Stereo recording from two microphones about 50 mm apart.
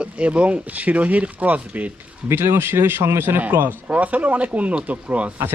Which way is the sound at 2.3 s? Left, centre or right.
Right.